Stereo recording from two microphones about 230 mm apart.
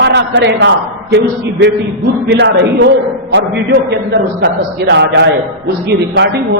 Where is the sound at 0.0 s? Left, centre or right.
Right.